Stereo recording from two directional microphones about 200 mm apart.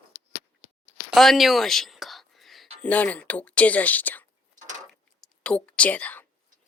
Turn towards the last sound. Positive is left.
turn(degrees=10)  # may be behind; listen again after turning